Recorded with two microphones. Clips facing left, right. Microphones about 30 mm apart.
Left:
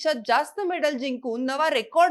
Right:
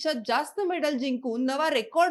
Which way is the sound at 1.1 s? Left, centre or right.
Left.